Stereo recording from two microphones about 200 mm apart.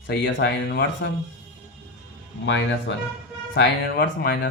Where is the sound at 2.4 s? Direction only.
65° left (ahead or behind).